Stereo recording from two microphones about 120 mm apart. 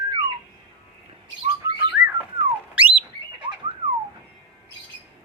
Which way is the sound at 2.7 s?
15° right (ahead or behind).